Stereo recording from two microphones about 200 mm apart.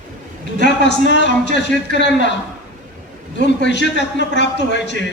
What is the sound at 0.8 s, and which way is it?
A man's voice, 60° left (ahead or behind).